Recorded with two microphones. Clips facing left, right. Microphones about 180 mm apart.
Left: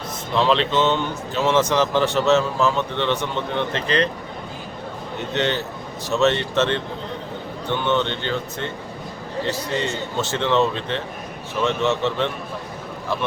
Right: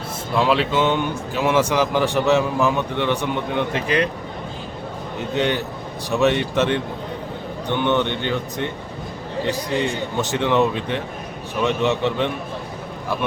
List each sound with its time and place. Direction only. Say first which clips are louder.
0.3 s speech: even; 10° right (ahead or behind)
5.3 s speech: right 2 dB; 10° right (ahead or behind)